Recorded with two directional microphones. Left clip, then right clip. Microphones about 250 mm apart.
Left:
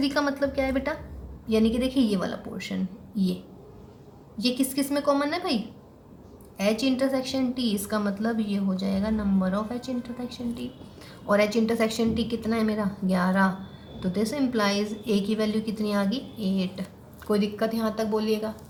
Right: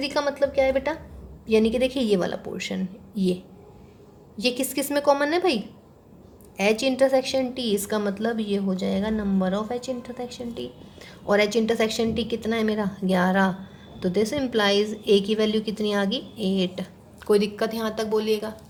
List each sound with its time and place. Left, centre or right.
0.0 s a woman's voice: right
4.4 s a woman's voice: right
6.6 s a woman's voice: right